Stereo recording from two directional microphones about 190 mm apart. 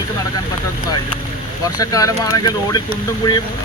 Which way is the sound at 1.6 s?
20° left (ahead or behind).